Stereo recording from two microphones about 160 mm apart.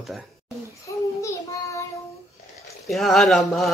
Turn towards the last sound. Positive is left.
turn(degrees=0)  # may be behind; listen again after turning